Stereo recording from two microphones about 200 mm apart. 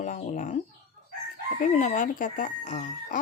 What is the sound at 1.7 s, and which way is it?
Speech, 35° left (ahead or behind).